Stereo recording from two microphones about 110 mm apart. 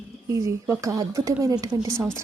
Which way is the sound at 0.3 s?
30° right (ahead or behind).